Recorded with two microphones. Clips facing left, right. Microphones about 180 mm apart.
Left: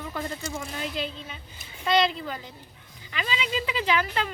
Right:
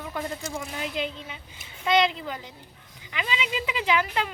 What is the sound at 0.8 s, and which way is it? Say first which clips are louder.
Speech: right 1 dB; 15° right (ahead or behind).